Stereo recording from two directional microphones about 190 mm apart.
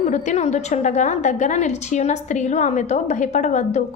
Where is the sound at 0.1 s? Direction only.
35° left (ahead or behind).